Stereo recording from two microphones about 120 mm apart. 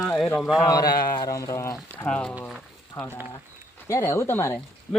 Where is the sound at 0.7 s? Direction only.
35° left (ahead or behind).